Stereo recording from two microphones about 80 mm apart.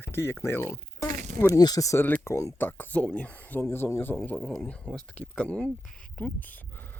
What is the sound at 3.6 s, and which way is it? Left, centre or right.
Speech, left.